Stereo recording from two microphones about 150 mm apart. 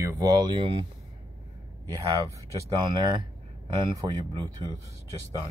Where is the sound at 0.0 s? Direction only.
25° right (ahead or behind).